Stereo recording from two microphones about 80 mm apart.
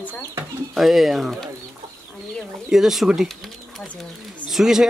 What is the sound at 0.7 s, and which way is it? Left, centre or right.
Speech, centre.